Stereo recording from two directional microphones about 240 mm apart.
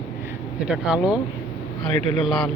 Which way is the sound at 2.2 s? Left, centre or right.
Centre.